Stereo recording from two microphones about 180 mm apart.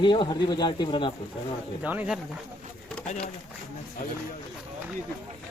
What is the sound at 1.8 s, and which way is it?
Speech, 10° right (ahead or behind).